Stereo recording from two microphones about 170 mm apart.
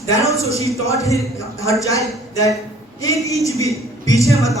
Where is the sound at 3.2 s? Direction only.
20° left (ahead or behind).